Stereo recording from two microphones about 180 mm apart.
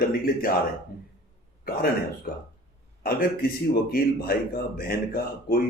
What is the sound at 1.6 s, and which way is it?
Speech, 55° left (ahead or behind).